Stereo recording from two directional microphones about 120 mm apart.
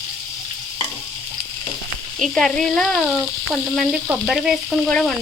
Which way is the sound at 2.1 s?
Centre (ahead or behind).